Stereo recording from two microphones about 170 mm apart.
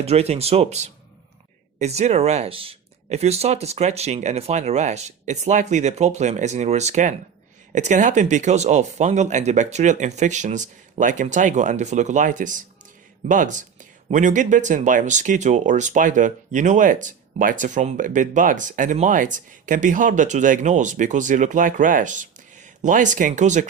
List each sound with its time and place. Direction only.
0.0 s speech: 40° right (ahead or behind)